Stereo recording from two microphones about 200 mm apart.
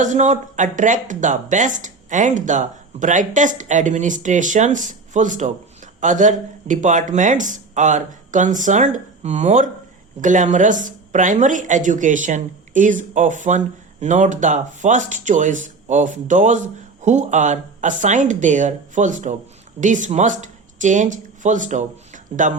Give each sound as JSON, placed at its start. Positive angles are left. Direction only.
{"t": 0.0, "sound": "speech", "side_deg": -35}